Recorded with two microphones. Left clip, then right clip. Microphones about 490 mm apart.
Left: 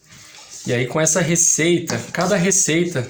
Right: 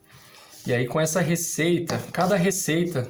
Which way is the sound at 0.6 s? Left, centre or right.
Right.